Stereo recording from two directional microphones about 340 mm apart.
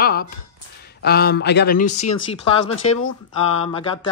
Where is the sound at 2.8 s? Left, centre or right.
Centre.